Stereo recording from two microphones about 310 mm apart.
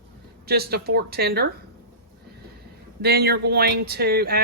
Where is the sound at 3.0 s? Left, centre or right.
Right.